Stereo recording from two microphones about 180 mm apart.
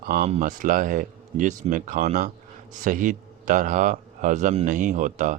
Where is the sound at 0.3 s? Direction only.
45° right (ahead or behind).